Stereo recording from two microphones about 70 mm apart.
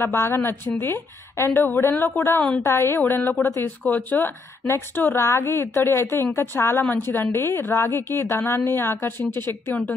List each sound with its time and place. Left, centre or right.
0.0 s a woman's voice: left
1.5 s a woman's voice: left
4.6 s a woman's voice: left